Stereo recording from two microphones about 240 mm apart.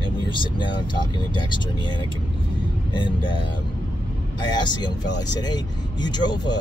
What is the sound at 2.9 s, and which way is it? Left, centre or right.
Speech, centre.